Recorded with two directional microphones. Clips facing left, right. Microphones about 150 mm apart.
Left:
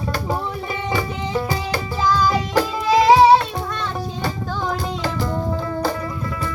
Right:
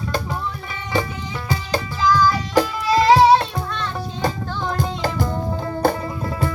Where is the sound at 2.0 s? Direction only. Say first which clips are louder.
Right 1 dB; 25° left (ahead or behind).